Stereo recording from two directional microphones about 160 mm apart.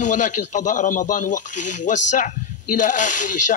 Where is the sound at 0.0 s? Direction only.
50° left (ahead or behind).